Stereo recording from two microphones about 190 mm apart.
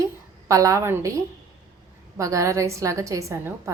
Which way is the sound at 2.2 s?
15° right (ahead or behind).